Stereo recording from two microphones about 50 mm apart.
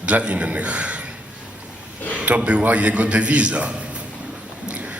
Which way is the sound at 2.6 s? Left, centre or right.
Right.